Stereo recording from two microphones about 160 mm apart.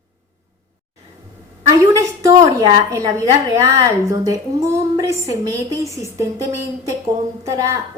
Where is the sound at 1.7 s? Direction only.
20° right (ahead or behind).